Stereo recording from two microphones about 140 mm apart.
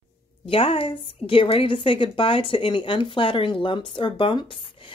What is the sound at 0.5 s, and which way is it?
A woman's voice, 40° left (ahead or behind).